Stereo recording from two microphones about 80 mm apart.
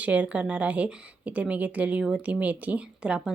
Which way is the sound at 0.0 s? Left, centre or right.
Centre.